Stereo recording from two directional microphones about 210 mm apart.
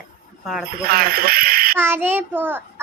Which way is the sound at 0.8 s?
45° right (ahead or behind).